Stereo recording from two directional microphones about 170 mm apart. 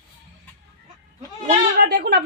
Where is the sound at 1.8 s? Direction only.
70° right (ahead or behind).